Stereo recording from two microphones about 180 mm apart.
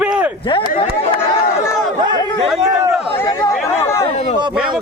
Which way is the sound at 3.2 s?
15° left (ahead or behind).